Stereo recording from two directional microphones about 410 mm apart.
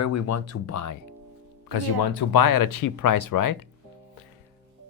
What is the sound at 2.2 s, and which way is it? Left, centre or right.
Speech, left.